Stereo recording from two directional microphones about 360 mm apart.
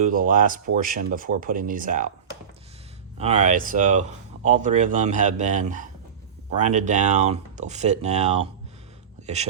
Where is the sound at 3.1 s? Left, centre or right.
Centre.